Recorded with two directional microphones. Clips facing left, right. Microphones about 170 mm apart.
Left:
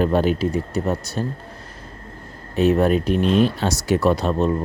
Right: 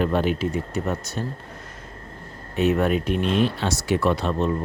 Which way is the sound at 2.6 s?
35° left (ahead or behind).